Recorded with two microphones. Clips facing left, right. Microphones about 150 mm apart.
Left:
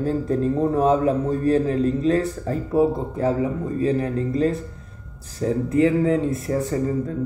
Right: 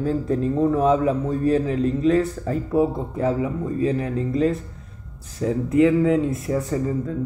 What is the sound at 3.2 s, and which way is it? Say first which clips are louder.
Speech: even; 35° left (ahead or behind).